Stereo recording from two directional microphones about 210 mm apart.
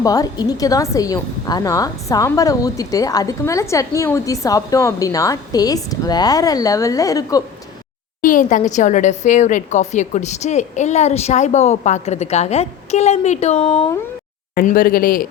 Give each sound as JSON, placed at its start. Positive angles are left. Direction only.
{"t": 0.0, "sound": "a woman's voice", "side_deg": 15}
{"t": 8.2, "sound": "a woman's voice", "side_deg": 40}
{"t": 14.5, "sound": "speech", "side_deg": 40}